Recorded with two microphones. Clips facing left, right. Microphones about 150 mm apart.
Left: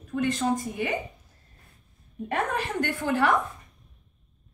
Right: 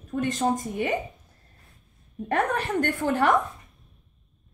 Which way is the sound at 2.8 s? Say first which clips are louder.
Even; 40° right (ahead or behind).